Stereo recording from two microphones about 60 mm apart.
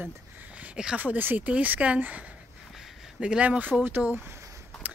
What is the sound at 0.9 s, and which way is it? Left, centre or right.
Speech, right.